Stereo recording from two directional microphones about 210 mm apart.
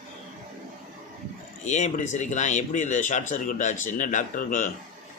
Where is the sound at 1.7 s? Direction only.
35° left (ahead or behind).